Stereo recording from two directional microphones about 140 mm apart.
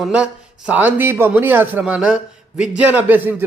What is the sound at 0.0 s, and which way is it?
Speech, 5° right (ahead or behind).